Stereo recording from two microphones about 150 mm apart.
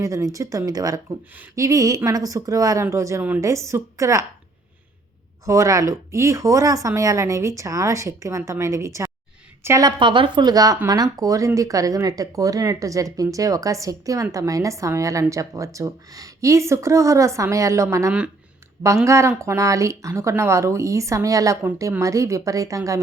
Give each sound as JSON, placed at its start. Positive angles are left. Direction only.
{"t": 0.0, "sound": "speech", "side_deg": -20}
{"t": 5.5, "sound": "speech", "side_deg": -20}
{"t": 10.0, "sound": "a woman's voice", "side_deg": -30}